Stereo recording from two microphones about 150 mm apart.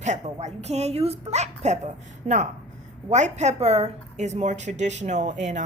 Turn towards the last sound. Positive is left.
turn(degrees=-55)  # may be behind; listen again after turning